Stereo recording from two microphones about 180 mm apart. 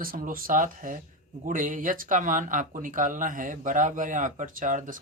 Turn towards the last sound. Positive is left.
turn(degrees=-45)  # may be behind; listen again after turning